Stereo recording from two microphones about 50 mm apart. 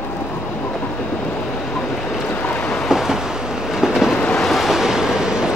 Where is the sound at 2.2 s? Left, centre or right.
Left.